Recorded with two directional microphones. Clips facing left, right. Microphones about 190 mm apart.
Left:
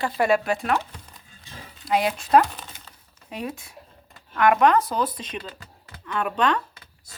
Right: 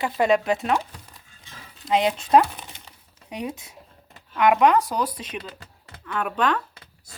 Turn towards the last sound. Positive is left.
turn(degrees=-5)  # may be behind; listen again after turning